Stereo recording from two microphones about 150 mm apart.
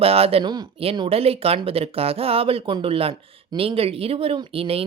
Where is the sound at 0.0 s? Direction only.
40° right (ahead or behind).